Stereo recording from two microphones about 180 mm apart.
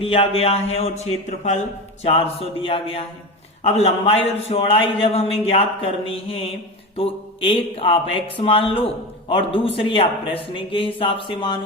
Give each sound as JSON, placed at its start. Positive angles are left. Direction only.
{"t": 0.0, "sound": "a man's voice", "side_deg": 35}